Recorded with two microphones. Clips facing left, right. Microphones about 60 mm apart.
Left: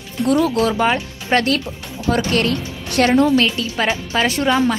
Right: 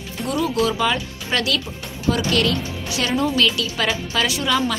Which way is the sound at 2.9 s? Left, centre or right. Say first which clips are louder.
Left 9 dB; left.